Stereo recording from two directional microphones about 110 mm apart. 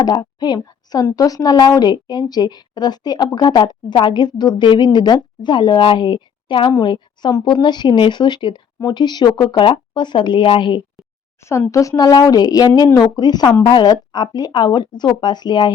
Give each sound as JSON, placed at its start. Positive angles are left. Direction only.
{"t": 0.0, "sound": "a woman's voice", "side_deg": 35}
{"t": 11.4, "sound": "a woman's voice", "side_deg": 25}